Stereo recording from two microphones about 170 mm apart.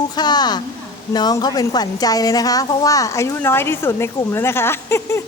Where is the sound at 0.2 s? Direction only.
25° left (ahead or behind).